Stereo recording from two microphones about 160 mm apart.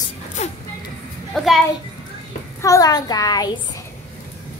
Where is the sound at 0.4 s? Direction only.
45° left (ahead or behind).